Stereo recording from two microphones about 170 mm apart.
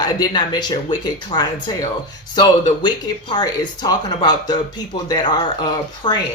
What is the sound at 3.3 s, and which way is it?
Speech, 25° left (ahead or behind).